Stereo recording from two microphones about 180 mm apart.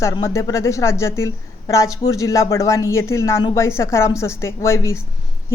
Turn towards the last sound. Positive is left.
turn(degrees=15)  # may be behind; listen again after turning